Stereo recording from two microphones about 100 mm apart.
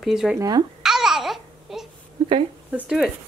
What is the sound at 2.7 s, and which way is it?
Speech, 10° right (ahead or behind).